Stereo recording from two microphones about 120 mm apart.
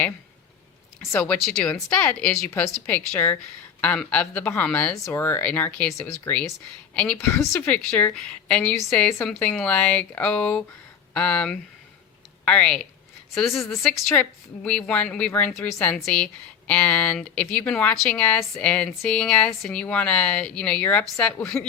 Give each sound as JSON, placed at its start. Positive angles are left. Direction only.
{"t": 1.2, "sound": "speech", "side_deg": 5}
{"t": 7.2, "sound": "a woman's voice", "side_deg": 20}
{"t": 7.5, "sound": "a woman's voice", "side_deg": 10}